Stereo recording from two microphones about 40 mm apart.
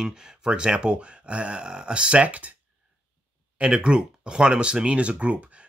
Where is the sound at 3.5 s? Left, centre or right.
Right.